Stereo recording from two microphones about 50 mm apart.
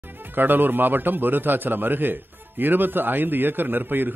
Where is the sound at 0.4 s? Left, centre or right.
Right.